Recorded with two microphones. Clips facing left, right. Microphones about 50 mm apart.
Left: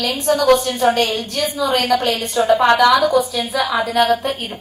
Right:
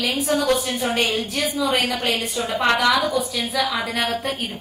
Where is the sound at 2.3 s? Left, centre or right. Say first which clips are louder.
Left 10 dB; left.